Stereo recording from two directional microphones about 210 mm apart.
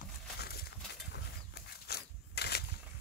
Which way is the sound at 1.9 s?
50° left (ahead or behind).